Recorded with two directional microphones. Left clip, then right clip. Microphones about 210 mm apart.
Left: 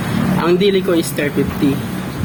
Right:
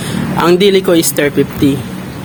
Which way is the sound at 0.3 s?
55° right (ahead or behind).